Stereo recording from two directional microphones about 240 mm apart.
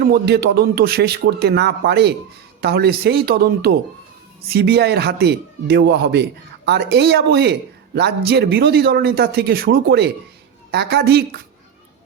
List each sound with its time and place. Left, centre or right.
0.0 s a man's voice: right